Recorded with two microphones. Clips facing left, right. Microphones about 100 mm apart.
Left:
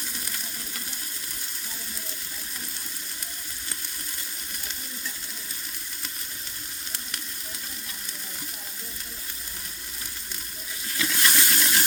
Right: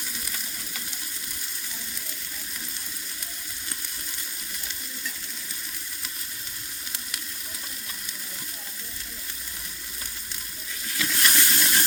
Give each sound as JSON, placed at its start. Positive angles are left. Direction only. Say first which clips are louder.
{"t": 10.9, "sound": "toilet flush", "louder": "even", "side_deg": 0}